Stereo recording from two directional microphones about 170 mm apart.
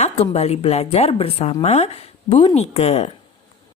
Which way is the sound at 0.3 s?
40° left (ahead or behind).